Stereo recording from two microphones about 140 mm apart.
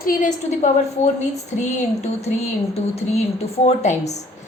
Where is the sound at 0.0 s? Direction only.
75° left (ahead or behind).